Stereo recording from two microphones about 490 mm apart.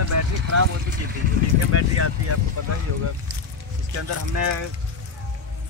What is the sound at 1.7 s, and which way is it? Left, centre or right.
Speech, right.